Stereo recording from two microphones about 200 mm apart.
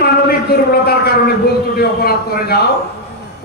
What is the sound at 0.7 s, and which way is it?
A man's voice, 50° left (ahead or behind).